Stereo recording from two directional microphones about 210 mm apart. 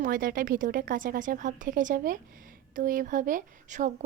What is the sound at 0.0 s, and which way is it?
Speech, 40° right (ahead or behind).